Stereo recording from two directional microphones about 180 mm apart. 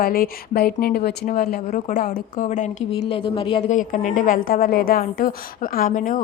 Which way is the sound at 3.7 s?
45° left (ahead or behind).